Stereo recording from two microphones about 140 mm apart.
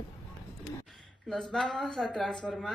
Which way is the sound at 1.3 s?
5° left (ahead or behind).